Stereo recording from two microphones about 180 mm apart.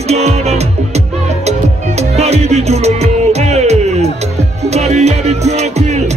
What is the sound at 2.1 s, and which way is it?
Music, 35° right (ahead or behind).